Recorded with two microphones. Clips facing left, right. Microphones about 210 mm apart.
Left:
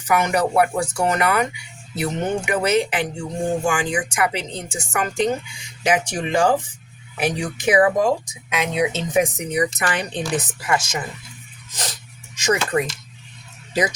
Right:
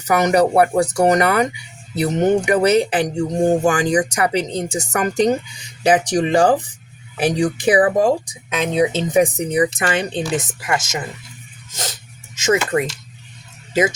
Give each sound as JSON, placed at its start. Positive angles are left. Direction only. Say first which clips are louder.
{"t": 0.1, "sound": "speech", "louder": "right 5 dB", "side_deg": -40}
{"t": 3.2, "sound": "speech", "louder": "right 9 dB", "side_deg": -55}
{"t": 3.7, "sound": "speech", "louder": "right 6 dB", "side_deg": -35}
{"t": 12.4, "sound": "speech", "louder": "right 3 dB", "side_deg": -25}